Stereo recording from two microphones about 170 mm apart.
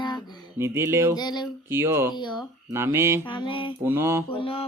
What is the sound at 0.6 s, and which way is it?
Speech, 15° right (ahead or behind).